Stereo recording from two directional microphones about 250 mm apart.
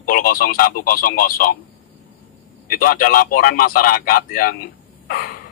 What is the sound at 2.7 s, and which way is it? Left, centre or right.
Speech, left.